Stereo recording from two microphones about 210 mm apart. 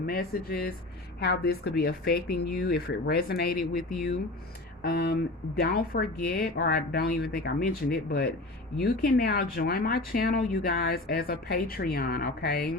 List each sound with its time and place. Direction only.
0.0 s speech: 45° left (ahead or behind)
4.8 s speech: 45° left (ahead or behind)